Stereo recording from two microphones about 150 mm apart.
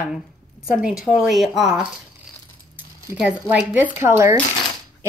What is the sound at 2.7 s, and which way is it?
Speech, 10° right (ahead or behind).